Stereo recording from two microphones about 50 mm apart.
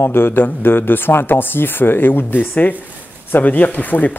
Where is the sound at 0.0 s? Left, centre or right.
Left.